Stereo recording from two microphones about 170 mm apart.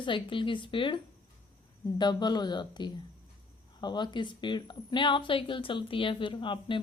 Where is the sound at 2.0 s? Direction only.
25° left (ahead or behind).